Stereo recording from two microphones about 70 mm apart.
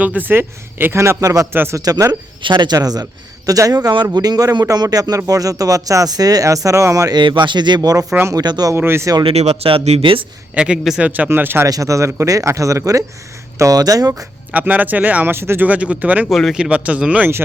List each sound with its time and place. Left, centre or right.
0.0 s a man's voice: right
7.1 s speech: right
8.3 s a man's voice: right
8.7 s a man's voice: right
10.5 s speech: centre
11.0 s speech: right
11.3 s a man's voice: right
11.6 s a man's voice: right
14.5 s speech: right
15.6 s speech: right
16.3 s speech: centre
16.6 s speech: centre